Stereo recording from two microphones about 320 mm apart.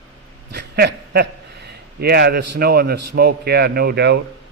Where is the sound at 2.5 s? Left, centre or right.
Right.